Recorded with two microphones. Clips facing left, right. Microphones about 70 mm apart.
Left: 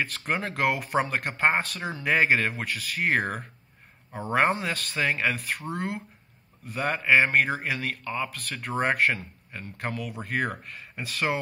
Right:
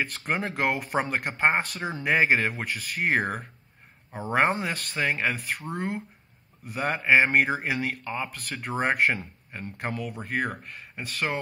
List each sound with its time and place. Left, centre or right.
0.0 s speech: centre
9.2 s a man's voice: centre
9.8 s speech: centre